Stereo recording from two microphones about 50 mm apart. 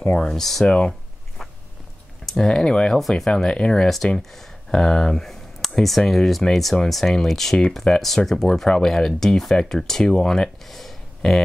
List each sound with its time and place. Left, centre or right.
0.2 s speech: centre
0.7 s speech: centre
2.2 s speech: centre
3.0 s speech: centre
3.3 s speech: centre
7.8 s speech: left
8.3 s speech: centre